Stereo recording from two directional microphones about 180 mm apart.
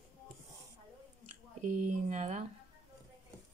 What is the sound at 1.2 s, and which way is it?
Speech, 40° right (ahead or behind).